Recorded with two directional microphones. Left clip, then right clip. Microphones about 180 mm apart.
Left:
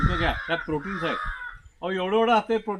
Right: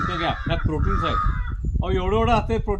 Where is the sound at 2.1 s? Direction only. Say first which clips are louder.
Left 1 dB; 25° right (ahead or behind).